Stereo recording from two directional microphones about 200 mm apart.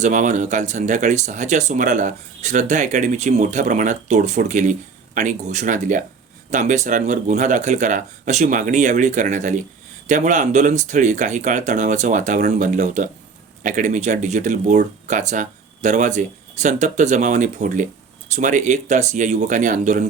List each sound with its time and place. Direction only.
0.0 s speech: 40° right (ahead or behind)